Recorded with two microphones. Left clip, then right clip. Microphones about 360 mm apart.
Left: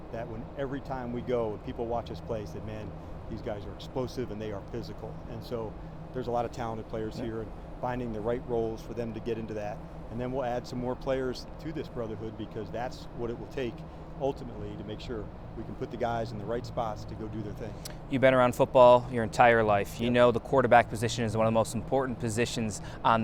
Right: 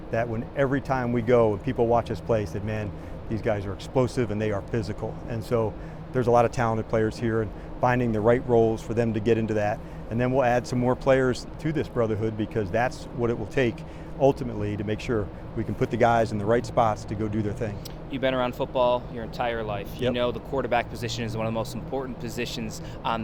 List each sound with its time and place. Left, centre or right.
0.1 s speech: right
10.2 s speech: right
14.2 s speech: right
18.1 s speech: left